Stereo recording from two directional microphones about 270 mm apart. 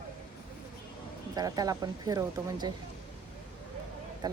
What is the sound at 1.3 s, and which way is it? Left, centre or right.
Speech, centre.